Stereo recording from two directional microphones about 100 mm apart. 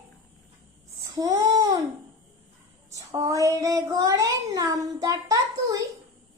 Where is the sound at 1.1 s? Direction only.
35° right (ahead or behind).